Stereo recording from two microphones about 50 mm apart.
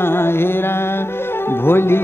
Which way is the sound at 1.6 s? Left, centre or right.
Left.